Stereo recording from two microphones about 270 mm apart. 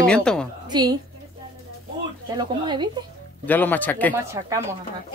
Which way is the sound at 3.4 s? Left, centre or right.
Centre.